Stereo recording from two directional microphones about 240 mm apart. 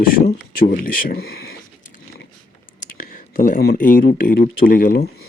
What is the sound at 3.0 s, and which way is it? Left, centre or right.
A man's voice, left.